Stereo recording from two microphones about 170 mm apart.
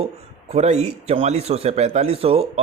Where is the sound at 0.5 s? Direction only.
40° right (ahead or behind).